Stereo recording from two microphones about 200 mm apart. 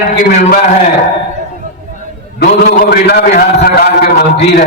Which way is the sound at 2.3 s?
50° left (ahead or behind).